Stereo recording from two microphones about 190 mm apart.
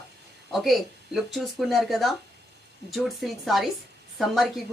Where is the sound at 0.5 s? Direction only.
Centre (ahead or behind).